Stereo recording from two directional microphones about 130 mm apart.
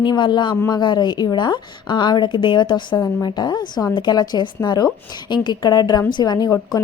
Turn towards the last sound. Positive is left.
turn(degrees=30)  # may be behind; listen again after turning